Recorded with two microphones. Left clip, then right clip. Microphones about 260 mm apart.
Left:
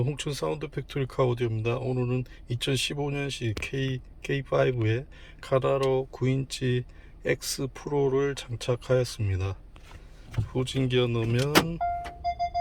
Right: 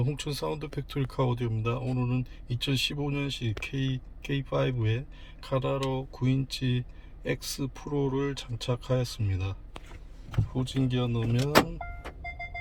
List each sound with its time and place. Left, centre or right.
0.0 s speech: centre